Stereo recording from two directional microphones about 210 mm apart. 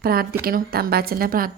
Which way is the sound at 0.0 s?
45° right (ahead or behind).